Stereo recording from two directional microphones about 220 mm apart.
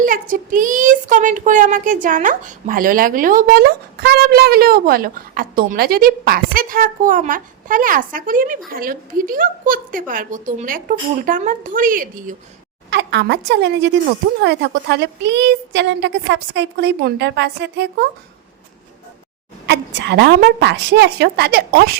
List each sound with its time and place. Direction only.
0.0 s speech: 40° right (ahead or behind)
12.9 s a woman's voice: 50° right (ahead or behind)
19.6 s a woman's voice: 50° right (ahead or behind)